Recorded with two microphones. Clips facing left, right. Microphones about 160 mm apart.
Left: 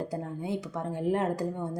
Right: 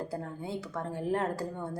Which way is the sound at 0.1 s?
20° left (ahead or behind).